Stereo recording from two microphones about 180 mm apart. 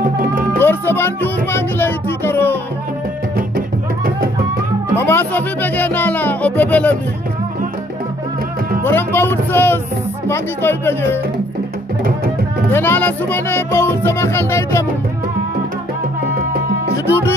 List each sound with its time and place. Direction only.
0.6 s music: 10° left (ahead or behind)
3.3 s music: 55° right (ahead or behind)
4.9 s music: 10° left (ahead or behind)
8.8 s music: 10° left (ahead or behind)
10.2 s speech: 15° left (ahead or behind)
12.7 s speech: 10° left (ahead or behind)